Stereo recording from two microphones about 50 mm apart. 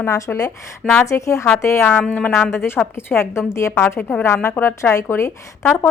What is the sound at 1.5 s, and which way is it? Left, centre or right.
Speech, left.